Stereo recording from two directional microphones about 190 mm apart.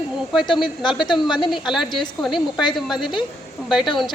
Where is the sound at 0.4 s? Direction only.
25° left (ahead or behind).